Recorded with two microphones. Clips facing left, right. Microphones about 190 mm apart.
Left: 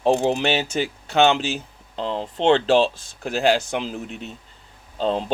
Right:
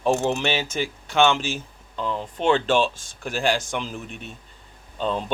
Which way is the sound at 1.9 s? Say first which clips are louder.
Left 2 dB; 30° left (ahead or behind).